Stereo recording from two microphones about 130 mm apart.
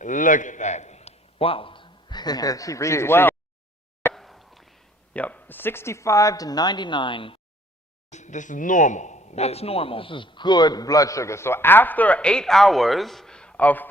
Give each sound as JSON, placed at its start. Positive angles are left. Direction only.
{"t": 0.0, "sound": "a man's voice", "side_deg": 80}
{"t": 4.1, "sound": "a sound", "side_deg": 0}
{"t": 5.2, "sound": "speech", "side_deg": 10}
{"t": 8.1, "sound": "speech", "side_deg": 70}